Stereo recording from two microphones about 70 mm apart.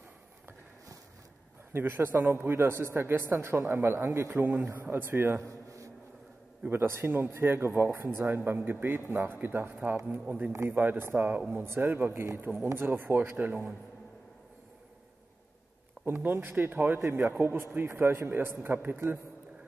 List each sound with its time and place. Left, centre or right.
1.7 s a man's voice: right
6.6 s a man's voice: right
11.6 s a man's voice: right
16.1 s a man's voice: right